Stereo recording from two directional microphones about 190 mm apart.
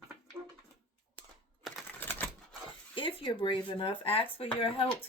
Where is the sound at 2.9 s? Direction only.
25° left (ahead or behind).